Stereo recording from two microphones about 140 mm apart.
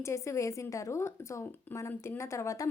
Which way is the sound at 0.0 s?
20° left (ahead or behind).